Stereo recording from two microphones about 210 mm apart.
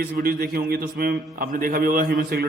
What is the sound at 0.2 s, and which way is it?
A man's voice, 45° right (ahead or behind).